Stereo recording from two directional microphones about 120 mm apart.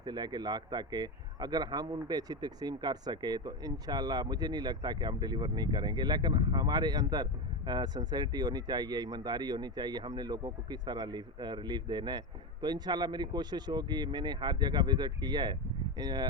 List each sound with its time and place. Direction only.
0.0 s a man's voice: 35° right (ahead or behind)